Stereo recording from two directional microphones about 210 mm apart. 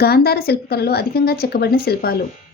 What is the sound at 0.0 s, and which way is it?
A woman's voice, 50° left (ahead or behind).